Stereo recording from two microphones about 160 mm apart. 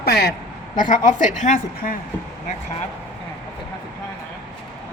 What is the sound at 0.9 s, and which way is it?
A woman's voice, 50° left (ahead or behind).